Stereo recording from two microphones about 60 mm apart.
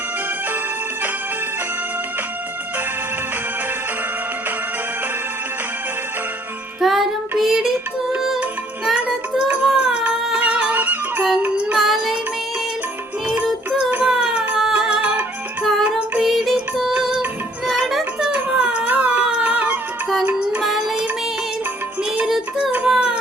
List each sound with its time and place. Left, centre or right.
6.8 s child singing: centre
9.7 s a sound: centre
10.1 s music: centre
11.8 s music: centre
13.7 s music: centre
16.2 s music: centre
18.3 s a sound: right
18.9 s dog: right
22.9 s a sound: centre